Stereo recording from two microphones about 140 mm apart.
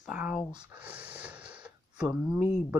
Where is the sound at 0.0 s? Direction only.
5° right (ahead or behind).